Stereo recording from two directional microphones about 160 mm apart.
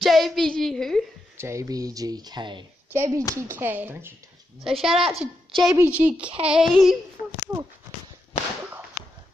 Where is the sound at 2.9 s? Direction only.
20° right (ahead or behind).